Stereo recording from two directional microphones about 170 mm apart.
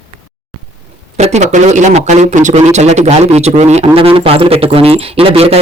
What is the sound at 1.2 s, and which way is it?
Speech, 40° right (ahead or behind).